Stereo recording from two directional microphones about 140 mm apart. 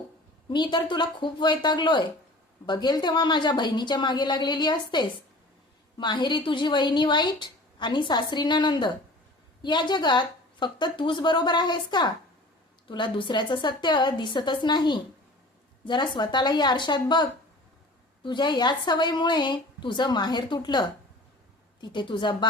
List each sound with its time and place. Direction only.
0.5 s speech: 35° left (ahead or behind)